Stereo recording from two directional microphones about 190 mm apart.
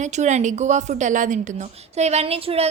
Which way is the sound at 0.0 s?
40° right (ahead or behind).